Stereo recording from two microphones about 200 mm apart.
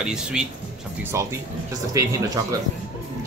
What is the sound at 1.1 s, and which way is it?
Speech, 15° right (ahead or behind).